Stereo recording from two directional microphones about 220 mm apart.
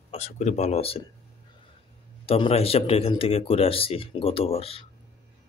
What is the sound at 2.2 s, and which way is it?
Speech, 25° left (ahead or behind).